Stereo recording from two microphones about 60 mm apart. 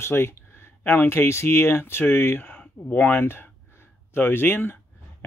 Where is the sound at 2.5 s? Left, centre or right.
Left.